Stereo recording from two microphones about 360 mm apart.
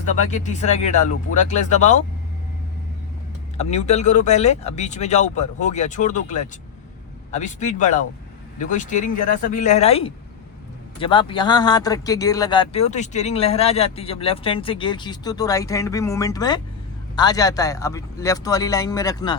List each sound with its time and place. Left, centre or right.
0.1 s speech: centre
3.6 s speech: centre